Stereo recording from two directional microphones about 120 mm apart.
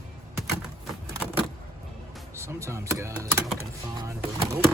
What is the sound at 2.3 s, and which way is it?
Speech, 25° right (ahead or behind).